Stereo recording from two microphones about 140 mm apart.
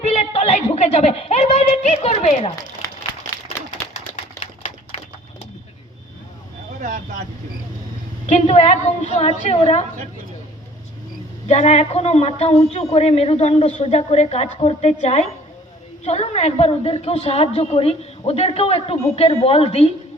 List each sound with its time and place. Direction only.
0.0 s a sound: 45° left (ahead or behind)
4.4 s typewriter: 55° left (ahead or behind)
8.3 s a woman's voice: 50° left (ahead or behind)
11.4 s a woman's voice: 55° left (ahead or behind)